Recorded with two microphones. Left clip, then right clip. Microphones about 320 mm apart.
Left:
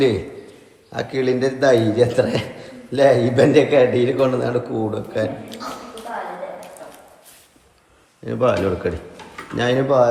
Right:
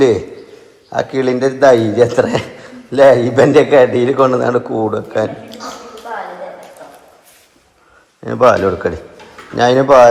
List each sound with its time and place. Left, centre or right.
0.9 s a man's voice: centre
8.2 s speech: centre